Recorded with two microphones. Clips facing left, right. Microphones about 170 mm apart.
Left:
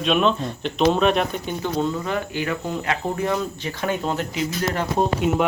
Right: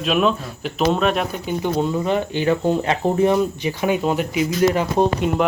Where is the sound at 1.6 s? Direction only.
15° right (ahead or behind).